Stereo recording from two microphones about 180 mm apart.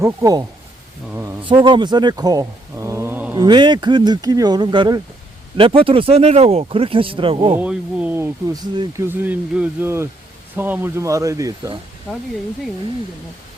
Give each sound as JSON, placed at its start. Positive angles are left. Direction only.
{"t": 0.0, "sound": "speech", "side_deg": -15}
{"t": 3.3, "sound": "speech", "side_deg": -25}
{"t": 7.6, "sound": "speech", "side_deg": -5}